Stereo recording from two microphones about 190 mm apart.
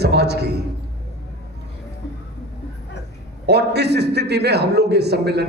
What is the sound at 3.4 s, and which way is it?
A man's voice, 60° right (ahead or behind).